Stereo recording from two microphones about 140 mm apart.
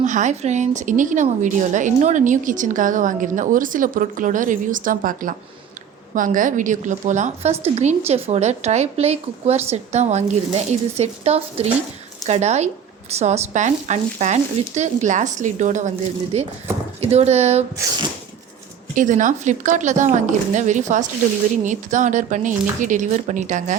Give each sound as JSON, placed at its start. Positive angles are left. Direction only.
{"t": 0.0, "sound": "a woman's voice", "side_deg": -60}
{"t": 18.9, "sound": "speech", "side_deg": -65}